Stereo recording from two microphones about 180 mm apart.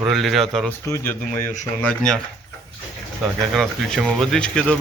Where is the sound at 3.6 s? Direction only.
Centre (ahead or behind).